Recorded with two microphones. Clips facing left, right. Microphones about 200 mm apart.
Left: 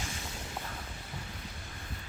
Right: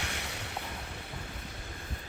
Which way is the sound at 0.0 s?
70° right (ahead or behind).